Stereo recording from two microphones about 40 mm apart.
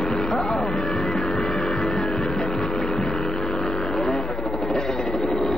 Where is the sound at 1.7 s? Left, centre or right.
Centre.